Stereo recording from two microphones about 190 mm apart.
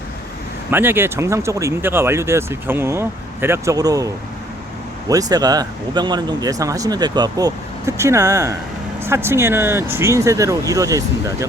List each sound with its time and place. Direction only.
0.7 s speech: 10° right (ahead or behind)